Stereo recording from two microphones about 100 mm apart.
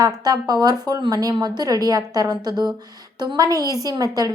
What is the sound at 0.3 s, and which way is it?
A woman's voice, 40° right (ahead or behind).